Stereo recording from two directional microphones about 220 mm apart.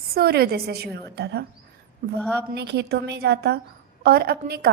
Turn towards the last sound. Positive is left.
turn(degrees=-45)  # may be behind; listen again after turning